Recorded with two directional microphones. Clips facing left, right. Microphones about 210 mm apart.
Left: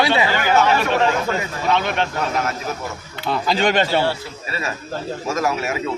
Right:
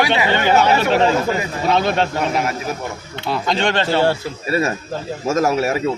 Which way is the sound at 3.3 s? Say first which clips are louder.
Left 1 dB; 5° left (ahead or behind).